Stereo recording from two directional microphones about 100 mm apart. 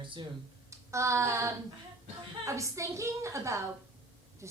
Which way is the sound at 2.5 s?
30° right (ahead or behind).